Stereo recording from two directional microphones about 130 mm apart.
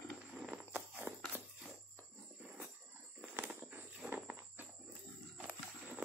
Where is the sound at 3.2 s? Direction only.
10° right (ahead or behind).